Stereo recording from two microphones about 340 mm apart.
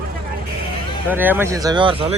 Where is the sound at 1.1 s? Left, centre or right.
Centre.